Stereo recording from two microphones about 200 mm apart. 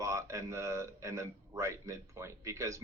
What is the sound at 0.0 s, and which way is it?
A man's voice, 15° right (ahead or behind).